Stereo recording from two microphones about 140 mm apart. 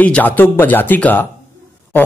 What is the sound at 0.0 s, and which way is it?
A man's voice, 10° left (ahead or behind).